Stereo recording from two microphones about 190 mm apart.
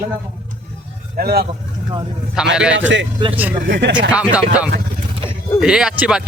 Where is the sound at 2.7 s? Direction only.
75° right (ahead or behind).